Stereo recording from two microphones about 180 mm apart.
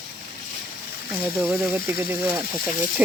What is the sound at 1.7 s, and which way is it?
Speech, 10° right (ahead or behind).